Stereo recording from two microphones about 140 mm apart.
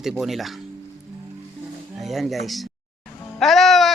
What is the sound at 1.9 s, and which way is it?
A man's voice, centre (ahead or behind).